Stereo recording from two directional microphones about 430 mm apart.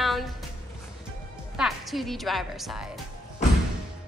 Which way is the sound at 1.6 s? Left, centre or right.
Centre.